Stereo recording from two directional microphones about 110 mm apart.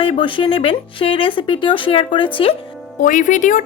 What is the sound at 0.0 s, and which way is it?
Speech, 50° left (ahead or behind).